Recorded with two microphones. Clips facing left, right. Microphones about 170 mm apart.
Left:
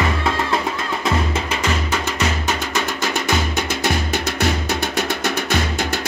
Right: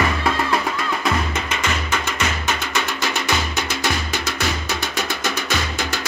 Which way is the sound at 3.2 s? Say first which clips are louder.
Left 2 dB; 50° left (ahead or behind).